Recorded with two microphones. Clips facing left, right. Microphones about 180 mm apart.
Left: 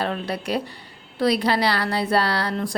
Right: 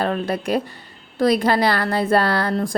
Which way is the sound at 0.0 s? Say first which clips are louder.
Right 4 dB; 50° right (ahead or behind).